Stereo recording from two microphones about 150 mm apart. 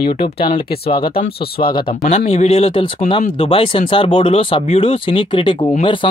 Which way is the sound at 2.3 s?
45° left (ahead or behind).